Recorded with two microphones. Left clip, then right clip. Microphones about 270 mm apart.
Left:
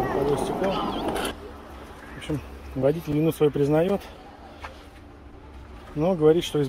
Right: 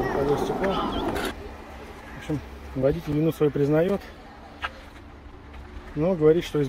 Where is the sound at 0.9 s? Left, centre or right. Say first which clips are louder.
Even; left.